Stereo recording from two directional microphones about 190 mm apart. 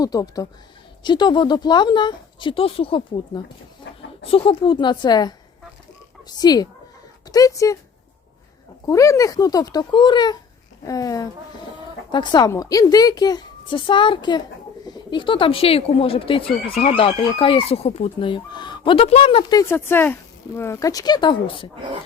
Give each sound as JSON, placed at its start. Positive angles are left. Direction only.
{"t": 0.0, "sound": "speech", "side_deg": 20}
{"t": 8.9, "sound": "speech", "side_deg": 15}